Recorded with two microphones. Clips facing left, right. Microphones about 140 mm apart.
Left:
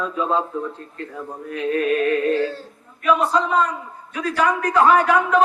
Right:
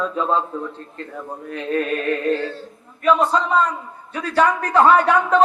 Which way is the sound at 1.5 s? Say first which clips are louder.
Left 2 dB; 35° right (ahead or behind).